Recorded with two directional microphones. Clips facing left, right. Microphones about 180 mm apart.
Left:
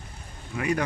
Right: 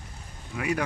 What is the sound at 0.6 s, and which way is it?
Speech, 5° right (ahead or behind).